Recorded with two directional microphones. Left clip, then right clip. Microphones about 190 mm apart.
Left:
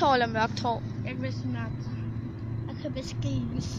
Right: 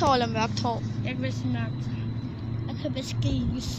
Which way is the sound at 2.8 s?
10° left (ahead or behind).